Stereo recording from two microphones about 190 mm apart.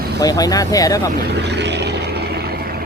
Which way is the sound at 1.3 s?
65° right (ahead or behind).